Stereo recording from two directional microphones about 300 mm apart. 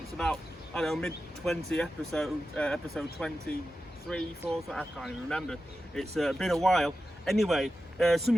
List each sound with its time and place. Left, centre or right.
0.2 s speech: centre